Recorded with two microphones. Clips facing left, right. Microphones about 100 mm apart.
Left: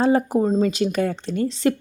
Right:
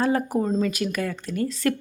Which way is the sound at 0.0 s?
25° left (ahead or behind).